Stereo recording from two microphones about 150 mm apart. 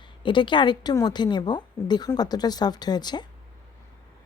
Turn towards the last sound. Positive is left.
turn(degrees=30)  # may be behind; listen again after turning